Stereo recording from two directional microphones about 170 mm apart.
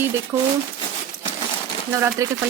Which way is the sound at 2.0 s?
20° right (ahead or behind).